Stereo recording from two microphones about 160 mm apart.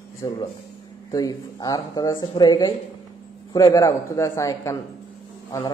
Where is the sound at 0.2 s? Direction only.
25° left (ahead or behind).